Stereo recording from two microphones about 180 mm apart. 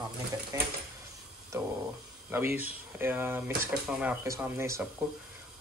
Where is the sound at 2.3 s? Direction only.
10° right (ahead or behind).